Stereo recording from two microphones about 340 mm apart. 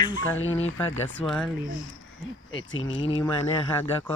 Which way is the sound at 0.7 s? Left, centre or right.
Centre.